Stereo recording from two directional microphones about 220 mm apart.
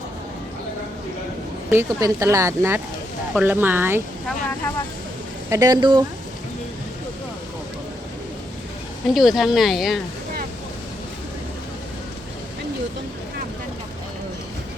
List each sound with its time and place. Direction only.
1.7 s speech: 15° right (ahead or behind)
5.5 s speech: 15° right (ahead or behind)
9.1 s speech: centre (ahead or behind)